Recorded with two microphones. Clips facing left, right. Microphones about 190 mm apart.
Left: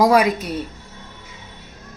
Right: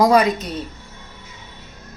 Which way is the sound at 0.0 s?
5° left (ahead or behind).